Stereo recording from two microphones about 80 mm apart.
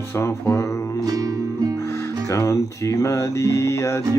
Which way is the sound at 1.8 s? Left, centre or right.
Left.